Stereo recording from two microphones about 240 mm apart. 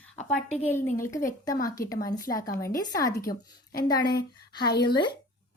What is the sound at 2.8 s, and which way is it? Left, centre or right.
Speech, centre.